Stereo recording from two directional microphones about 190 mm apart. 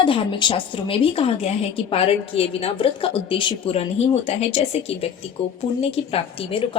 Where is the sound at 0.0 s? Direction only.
25° left (ahead or behind).